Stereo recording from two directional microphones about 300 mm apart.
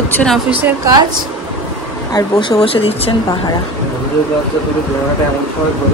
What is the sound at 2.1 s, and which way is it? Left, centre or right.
A woman's voice, centre.